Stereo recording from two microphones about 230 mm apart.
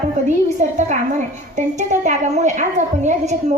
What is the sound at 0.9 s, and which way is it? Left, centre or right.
A woman's voice, right.